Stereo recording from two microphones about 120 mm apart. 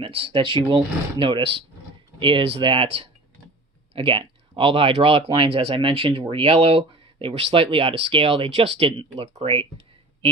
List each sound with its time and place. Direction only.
0.0 s speech: 50° right (ahead or behind)